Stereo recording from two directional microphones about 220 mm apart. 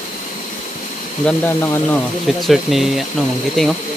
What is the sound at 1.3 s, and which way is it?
Speech, 10° left (ahead or behind).